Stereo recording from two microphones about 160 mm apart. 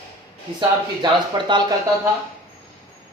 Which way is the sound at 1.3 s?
30° right (ahead or behind).